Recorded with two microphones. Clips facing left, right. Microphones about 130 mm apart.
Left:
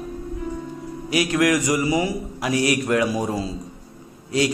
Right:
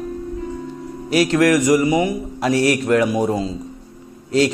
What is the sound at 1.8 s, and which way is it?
Speech, 20° right (ahead or behind).